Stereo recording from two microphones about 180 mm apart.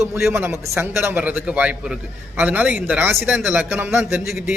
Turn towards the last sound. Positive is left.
turn(degrees=-5)  # may be behind; listen again after turning